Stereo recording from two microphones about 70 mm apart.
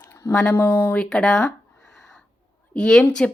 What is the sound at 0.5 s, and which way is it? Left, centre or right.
Speech, left.